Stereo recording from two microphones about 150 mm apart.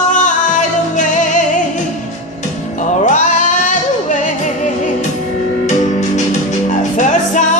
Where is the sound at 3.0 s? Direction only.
55° left (ahead or behind).